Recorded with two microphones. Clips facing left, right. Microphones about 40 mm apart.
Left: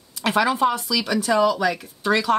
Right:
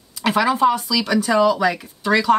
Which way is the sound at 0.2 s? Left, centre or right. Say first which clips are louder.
Right 3 dB; centre.